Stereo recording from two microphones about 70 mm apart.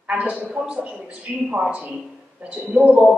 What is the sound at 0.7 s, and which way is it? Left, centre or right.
Speech, centre.